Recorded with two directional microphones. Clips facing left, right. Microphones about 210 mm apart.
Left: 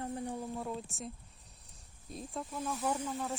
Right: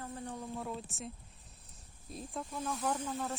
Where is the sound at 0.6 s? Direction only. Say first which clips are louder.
Left 1 dB; centre (ahead or behind).